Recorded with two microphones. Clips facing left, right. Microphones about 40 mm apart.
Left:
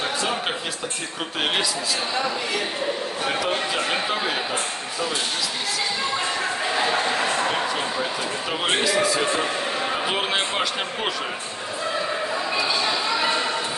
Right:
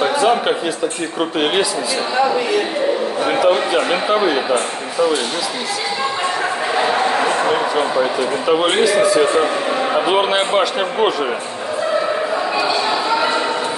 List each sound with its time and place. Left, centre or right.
1.4 s a man's voice: centre
3.3 s speech: centre
6.7 s a sound: right
8.5 s a man's voice: centre